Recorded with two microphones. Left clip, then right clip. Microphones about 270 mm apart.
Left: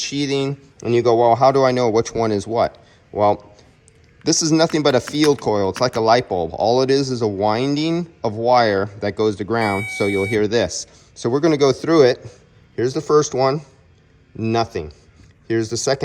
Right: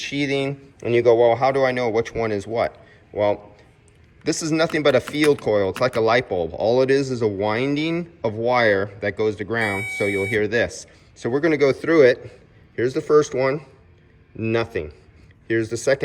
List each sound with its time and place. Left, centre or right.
0.0 s speech: centre